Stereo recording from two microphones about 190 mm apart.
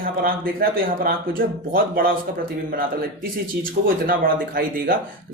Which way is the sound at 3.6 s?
50° right (ahead or behind).